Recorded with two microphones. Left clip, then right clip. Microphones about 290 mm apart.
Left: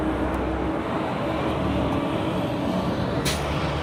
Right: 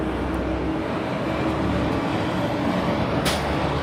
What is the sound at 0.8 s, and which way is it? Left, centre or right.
Vehicle, centre.